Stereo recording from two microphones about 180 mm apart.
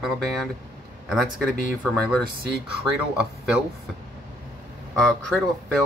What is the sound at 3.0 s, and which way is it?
Speech, 5° right (ahead or behind).